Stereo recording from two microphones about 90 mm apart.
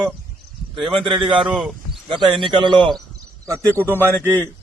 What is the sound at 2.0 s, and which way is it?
Speech, 60° right (ahead or behind).